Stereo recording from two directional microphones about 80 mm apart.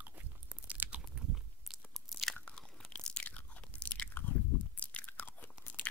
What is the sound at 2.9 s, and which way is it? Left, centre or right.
Crunch, centre.